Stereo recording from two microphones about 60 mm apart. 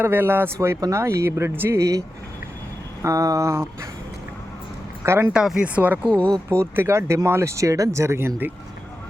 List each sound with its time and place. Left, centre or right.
0.0 s speech: right
1.7 s speech: right
5.0 s speech: right
5.3 s speech: centre
5.6 s speech: right
6.1 s speech: centre
6.5 s speech: right
7.5 s speech: right